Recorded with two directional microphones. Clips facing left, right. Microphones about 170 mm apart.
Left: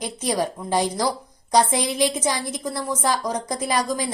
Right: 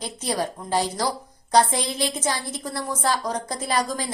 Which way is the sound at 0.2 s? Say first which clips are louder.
Left 3 dB; 15° left (ahead or behind).